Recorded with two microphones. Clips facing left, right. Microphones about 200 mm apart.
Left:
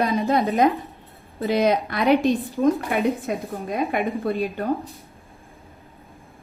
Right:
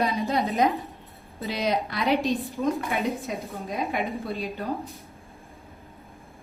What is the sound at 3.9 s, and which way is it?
Speech, 55° left (ahead or behind).